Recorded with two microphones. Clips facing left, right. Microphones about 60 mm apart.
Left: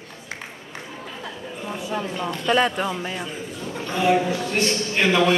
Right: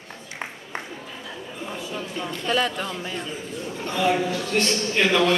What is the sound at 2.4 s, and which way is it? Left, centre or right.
Speech, left.